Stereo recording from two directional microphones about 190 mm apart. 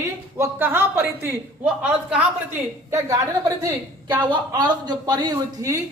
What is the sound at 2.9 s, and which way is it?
Speech, 15° right (ahead or behind).